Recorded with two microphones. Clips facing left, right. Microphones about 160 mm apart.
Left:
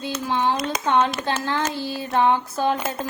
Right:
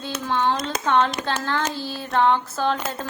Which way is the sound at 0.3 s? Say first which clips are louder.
Even; 15° left (ahead or behind).